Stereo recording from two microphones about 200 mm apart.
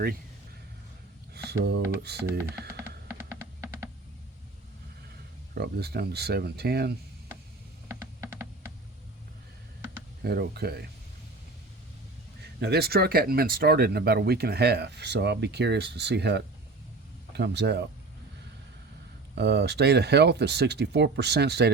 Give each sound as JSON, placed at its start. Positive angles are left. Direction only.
{"t": 1.3, "sound": "speech", "side_deg": -55}
{"t": 5.5, "sound": "speech", "side_deg": -50}
{"t": 7.9, "sound": "typing", "side_deg": -15}
{"t": 10.2, "sound": "speech", "side_deg": -55}
{"t": 12.5, "sound": "speech", "side_deg": -55}
{"t": 19.4, "sound": "speech", "side_deg": -55}